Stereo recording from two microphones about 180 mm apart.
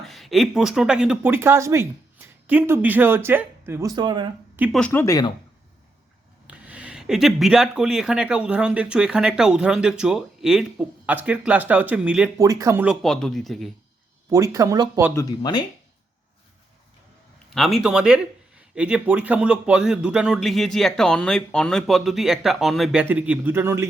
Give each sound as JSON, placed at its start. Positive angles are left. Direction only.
{"t": 0.0, "sound": "speech", "side_deg": 0}
{"t": 4.9, "sound": "speech", "side_deg": 15}
{"t": 6.5, "sound": "speech", "side_deg": -5}
{"t": 12.4, "sound": "speech", "side_deg": -20}
{"t": 12.8, "sound": "speech", "side_deg": 0}
{"t": 14.3, "sound": "speech", "side_deg": -20}
{"t": 15.1, "sound": "speech", "side_deg": 20}
{"t": 17.5, "sound": "speech", "side_deg": 0}